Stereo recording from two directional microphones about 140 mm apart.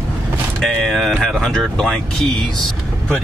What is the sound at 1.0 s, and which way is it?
Speech, centre (ahead or behind).